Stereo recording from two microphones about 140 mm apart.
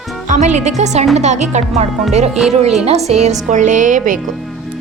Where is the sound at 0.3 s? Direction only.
55° right (ahead or behind).